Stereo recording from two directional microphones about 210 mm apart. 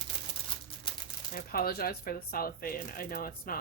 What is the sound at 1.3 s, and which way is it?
Speech, 45° left (ahead or behind).